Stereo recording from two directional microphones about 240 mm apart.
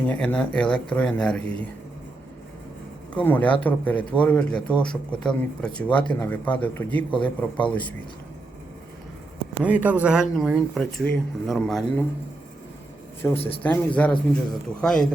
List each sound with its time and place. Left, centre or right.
0.1 s speech: centre
3.2 s speech: centre
9.6 s speech: centre
13.3 s speech: left
13.6 s speech: centre